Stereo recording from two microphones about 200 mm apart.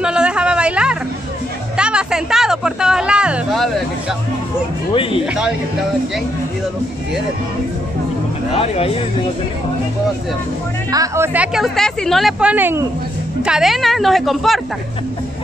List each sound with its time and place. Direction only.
0.0 s a sound: 5° right (ahead or behind)
5.2 s a woman's voice: 5° right (ahead or behind)
8.5 s speech: 30° left (ahead or behind)
10.9 s speech: 15° right (ahead or behind)
11.3 s a woman's voice: 5° right (ahead or behind)